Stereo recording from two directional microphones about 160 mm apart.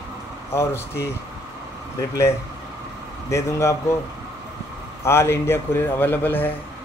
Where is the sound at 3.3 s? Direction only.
20° left (ahead or behind).